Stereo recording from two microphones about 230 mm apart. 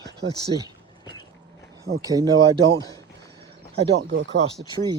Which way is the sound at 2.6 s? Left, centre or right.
Right.